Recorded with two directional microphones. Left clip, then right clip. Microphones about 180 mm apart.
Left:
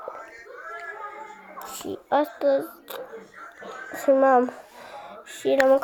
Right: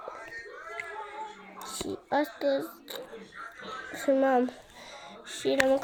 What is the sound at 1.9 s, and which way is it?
Speech, 5° right (ahead or behind).